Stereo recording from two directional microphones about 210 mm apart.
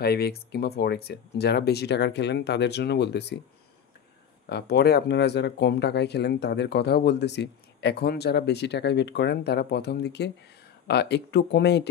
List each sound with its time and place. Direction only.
0.0 s speech: 50° left (ahead or behind)
4.5 s speech: 50° left (ahead or behind)